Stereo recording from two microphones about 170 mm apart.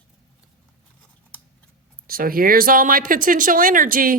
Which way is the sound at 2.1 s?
60° right (ahead or behind).